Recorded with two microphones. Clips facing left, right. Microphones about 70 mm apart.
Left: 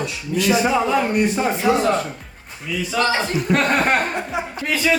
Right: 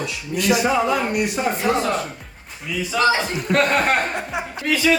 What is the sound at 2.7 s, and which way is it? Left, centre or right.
Speech, centre.